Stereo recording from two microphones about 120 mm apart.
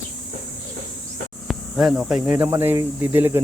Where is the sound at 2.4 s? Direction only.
20° right (ahead or behind).